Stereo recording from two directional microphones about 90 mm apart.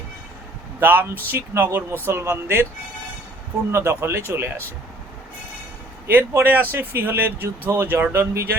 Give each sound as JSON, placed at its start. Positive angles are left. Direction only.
{"t": 0.8, "sound": "speech", "side_deg": -20}
{"t": 3.7, "sound": "speech", "side_deg": -30}
{"t": 6.1, "sound": "speech", "side_deg": -20}